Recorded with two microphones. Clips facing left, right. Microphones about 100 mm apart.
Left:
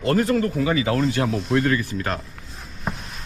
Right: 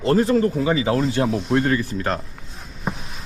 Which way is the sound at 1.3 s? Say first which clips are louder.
Right 2 dB; centre (ahead or behind).